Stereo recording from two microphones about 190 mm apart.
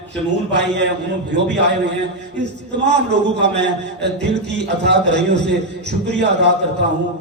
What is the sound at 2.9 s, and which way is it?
A man's voice, 65° right (ahead or behind).